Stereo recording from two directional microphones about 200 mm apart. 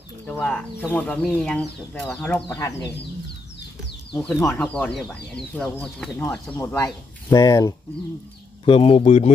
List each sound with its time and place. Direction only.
0.3 s speech: 5° left (ahead or behind)
2.5 s speech: 20° left (ahead or behind)
4.1 s speech: 5° left (ahead or behind)
4.4 s speech: 15° left (ahead or behind)
4.6 s speech: 5° left (ahead or behind)
8.6 s speech: 30° left (ahead or behind)